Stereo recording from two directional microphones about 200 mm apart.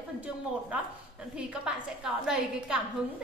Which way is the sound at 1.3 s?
5° right (ahead or behind).